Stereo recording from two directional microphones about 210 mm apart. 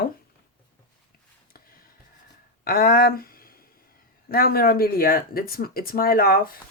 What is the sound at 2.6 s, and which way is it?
Speech, 45° left (ahead or behind).